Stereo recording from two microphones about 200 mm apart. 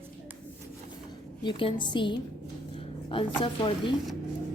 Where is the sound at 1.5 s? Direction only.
25° left (ahead or behind).